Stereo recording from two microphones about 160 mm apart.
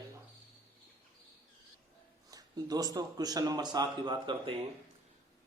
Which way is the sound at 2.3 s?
25° right (ahead or behind).